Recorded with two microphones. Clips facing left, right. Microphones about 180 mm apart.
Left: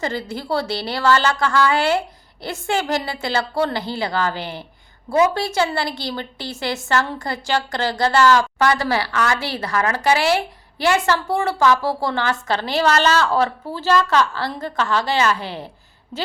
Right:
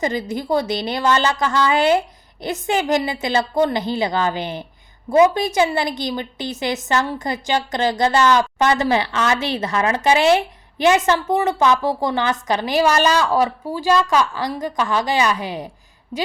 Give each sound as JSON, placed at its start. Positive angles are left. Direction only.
{"t": 0.0, "sound": "a woman's voice", "side_deg": -20}